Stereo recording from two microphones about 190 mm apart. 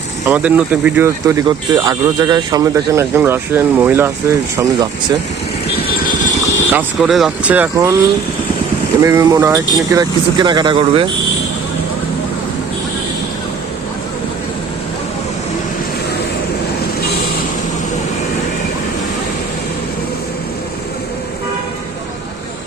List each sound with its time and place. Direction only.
0.3 s speech: 10° right (ahead or behind)
6.7 s speech: centre (ahead or behind)
9.0 s speech: 15° right (ahead or behind)